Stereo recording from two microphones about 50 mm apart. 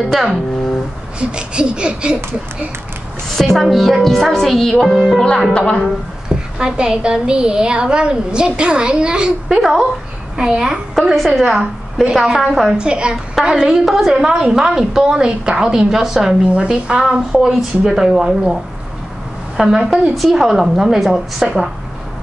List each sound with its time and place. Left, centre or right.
0.1 s a woman's voice: centre
1.3 s a sound: centre
3.3 s speech: centre
3.6 s a woman's voice: centre
5.5 s a woman's voice: left
6.2 s a woman's voice: centre
9.6 s a woman's voice: centre
11.1 s a woman's voice: centre
11.4 s a woman's voice: centre
12.7 s a sound: centre
13.7 s a woman's voice: centre
14.2 s a woman's voice: centre